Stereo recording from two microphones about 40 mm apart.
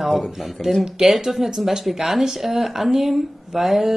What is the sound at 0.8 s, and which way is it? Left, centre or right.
Speech, centre.